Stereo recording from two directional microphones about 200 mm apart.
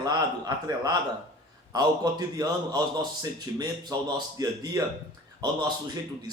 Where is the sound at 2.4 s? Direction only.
20° right (ahead or behind).